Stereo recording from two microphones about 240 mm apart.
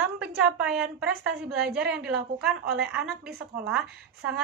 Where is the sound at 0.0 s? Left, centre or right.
Centre.